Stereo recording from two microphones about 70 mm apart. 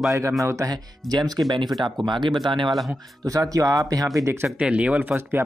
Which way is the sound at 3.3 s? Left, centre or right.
Right.